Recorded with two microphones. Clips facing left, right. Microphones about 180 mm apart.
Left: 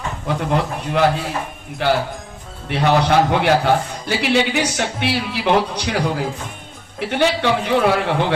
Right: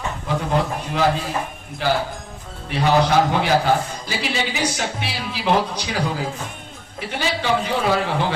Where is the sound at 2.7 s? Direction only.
65° left (ahead or behind).